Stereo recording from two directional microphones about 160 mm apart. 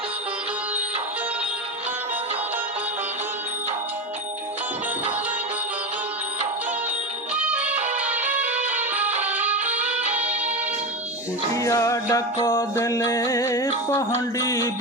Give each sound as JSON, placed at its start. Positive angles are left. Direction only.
{"t": 7.3, "sound": "music", "side_deg": -10}
{"t": 11.5, "sound": "music", "side_deg": 20}